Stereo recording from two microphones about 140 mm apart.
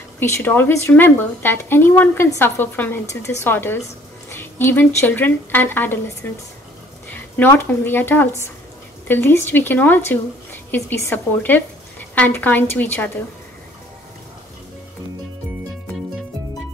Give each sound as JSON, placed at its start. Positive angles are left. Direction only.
{"t": 0.2, "sound": "a woman's voice", "side_deg": 15}
{"t": 7.1, "sound": "a woman's voice", "side_deg": 15}